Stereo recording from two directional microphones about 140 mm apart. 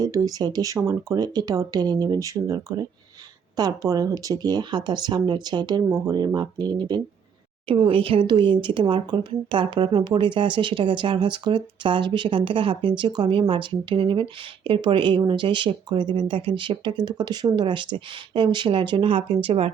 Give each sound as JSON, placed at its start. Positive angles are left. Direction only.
{"t": 0.0, "sound": "a woman's voice", "side_deg": -25}